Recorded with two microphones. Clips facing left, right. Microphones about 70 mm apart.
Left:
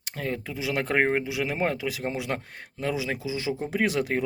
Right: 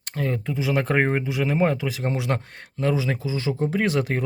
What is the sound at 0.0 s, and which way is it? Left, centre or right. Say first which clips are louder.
Speech: right 4 dB; centre.